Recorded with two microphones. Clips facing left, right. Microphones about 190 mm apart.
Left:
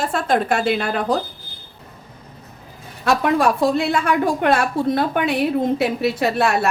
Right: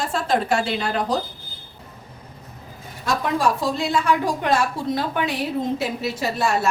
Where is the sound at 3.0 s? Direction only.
65° left (ahead or behind).